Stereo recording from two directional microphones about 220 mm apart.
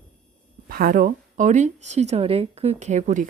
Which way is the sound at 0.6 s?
40° right (ahead or behind).